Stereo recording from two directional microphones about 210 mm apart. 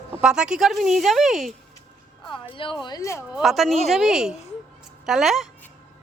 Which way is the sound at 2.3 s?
25° left (ahead or behind).